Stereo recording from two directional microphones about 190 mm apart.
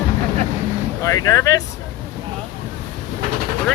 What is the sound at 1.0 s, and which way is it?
Speech, 20° left (ahead or behind).